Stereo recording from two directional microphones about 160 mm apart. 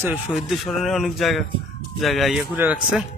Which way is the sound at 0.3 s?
Centre (ahead or behind).